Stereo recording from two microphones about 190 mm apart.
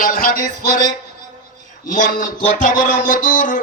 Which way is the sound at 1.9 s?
45° left (ahead or behind).